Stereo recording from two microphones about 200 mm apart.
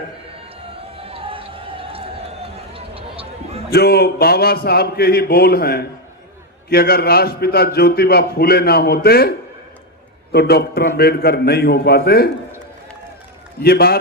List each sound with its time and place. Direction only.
0.9 s run: 30° right (ahead or behind)
3.7 s a man's voice: 50° left (ahead or behind)
10.3 s a man's voice: 50° left (ahead or behind)
13.6 s a man's voice: 50° left (ahead or behind)